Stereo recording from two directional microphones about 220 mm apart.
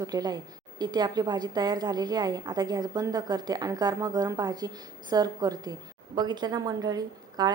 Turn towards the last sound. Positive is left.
turn(degrees=-15)  # may be behind; listen again after turning